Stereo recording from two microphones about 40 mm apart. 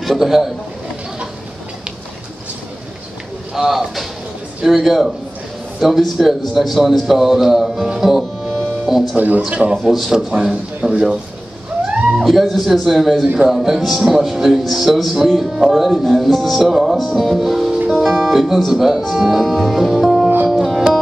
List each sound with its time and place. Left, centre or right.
0.0 s a man's voice: centre
3.5 s a man's voice: centre
9.1 s speech: right
9.5 s a man's voice: right
9.8 s a man's voice: centre
10.1 s a man's voice: centre
12.3 s a man's voice: centre
20.4 s music: centre